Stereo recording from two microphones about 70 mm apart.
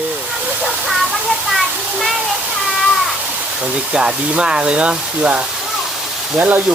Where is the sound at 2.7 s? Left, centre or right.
Centre.